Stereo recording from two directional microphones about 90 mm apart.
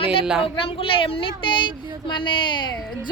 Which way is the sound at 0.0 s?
90° left.